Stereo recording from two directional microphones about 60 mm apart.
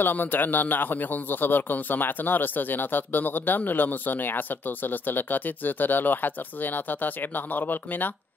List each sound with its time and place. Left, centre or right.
0.0 s speech: left